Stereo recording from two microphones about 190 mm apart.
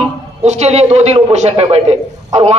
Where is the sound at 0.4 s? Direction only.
35° right (ahead or behind).